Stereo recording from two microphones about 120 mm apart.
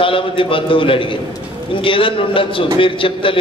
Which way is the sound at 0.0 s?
45° left (ahead or behind).